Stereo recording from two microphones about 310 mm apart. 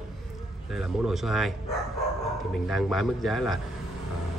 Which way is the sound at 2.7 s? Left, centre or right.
Centre.